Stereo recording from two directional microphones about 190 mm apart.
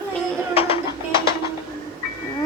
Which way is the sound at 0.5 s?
30° left (ahead or behind).